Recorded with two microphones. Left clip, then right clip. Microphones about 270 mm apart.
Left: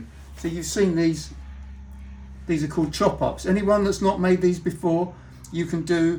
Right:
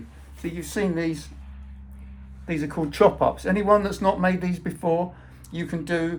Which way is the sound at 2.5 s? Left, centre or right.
Centre.